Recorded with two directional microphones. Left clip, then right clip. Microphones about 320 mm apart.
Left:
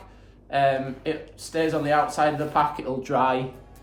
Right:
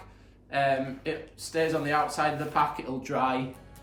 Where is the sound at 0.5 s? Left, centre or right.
Centre.